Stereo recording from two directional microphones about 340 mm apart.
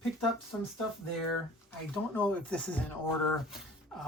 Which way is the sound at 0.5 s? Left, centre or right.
Centre.